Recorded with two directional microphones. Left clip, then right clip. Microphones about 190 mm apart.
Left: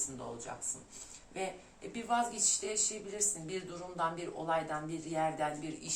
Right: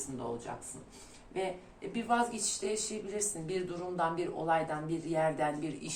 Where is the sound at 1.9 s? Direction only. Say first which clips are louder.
Right 2 dB; 15° right (ahead or behind).